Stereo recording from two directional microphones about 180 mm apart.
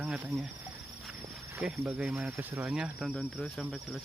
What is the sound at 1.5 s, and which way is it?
Speech, 10° right (ahead or behind).